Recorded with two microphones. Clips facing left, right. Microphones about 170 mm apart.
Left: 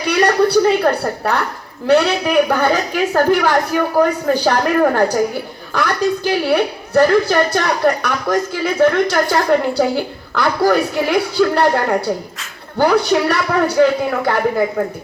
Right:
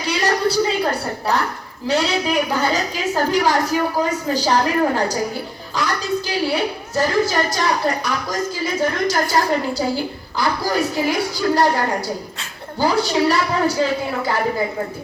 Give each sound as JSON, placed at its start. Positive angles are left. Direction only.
{"t": 0.0, "sound": "a woman's voice", "side_deg": 60}